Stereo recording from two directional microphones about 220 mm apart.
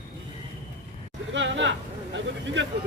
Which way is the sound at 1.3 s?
55° right (ahead or behind).